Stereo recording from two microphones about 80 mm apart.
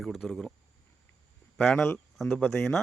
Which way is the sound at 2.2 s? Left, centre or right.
Left.